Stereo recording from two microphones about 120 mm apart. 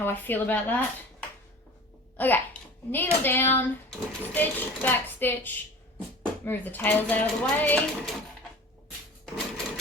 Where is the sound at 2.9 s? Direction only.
15° left (ahead or behind).